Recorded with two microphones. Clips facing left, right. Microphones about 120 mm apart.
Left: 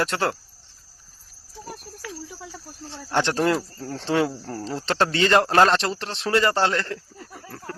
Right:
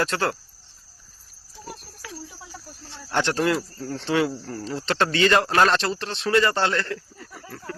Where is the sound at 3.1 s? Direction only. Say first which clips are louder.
Left 1 dB; 25° left (ahead or behind).